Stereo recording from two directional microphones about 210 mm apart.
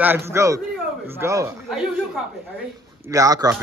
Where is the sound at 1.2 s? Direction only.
15° right (ahead or behind).